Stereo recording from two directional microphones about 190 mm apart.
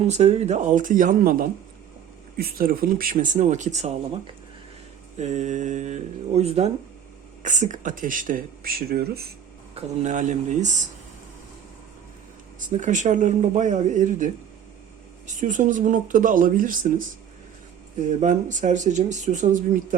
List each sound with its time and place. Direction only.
0.1 s speech: 35° right (ahead or behind)
5.1 s speech: 35° right (ahead or behind); by 9.3 s 55° right (ahead or behind)
9.7 s speech: 40° right (ahead or behind)
12.5 s speech: 40° right (ahead or behind)
15.3 s speech: 40° right (ahead or behind)
18.2 s speech: 40° right (ahead or behind)